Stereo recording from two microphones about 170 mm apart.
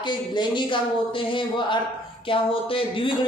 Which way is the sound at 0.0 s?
25° left (ahead or behind).